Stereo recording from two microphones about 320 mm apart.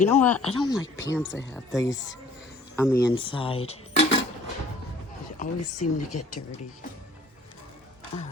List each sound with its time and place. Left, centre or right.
0.1 s speech: centre
2.7 s dishes: centre
5.4 s speech: left